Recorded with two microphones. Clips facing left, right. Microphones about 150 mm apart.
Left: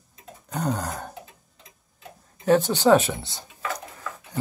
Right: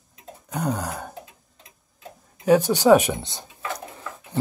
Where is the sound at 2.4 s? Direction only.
10° right (ahead or behind).